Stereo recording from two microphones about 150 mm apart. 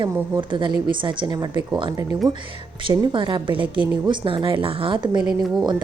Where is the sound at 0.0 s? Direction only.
30° right (ahead or behind).